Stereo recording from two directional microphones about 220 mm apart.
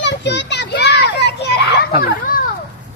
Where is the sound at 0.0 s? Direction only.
50° left (ahead or behind).